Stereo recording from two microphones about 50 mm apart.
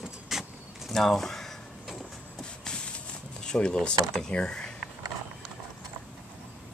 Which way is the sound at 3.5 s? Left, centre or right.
Centre.